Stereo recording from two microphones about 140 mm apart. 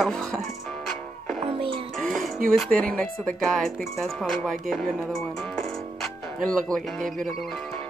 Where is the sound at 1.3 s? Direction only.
45° right (ahead or behind).